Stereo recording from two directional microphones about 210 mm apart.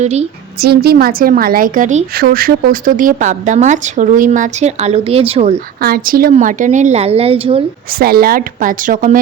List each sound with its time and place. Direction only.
0.0 s a woman's voice: 30° right (ahead or behind)
0.6 s a woman's voice: 50° right (ahead or behind); by 5.5 s 30° right (ahead or behind)
5.8 s a woman's voice: 45° right (ahead or behind); by 7.6 s 25° right (ahead or behind)
7.9 s a woman's voice: 45° right (ahead or behind)